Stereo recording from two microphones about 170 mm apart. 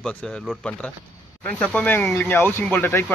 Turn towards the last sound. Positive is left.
turn(degrees=15)  # may be behind; listen again after turning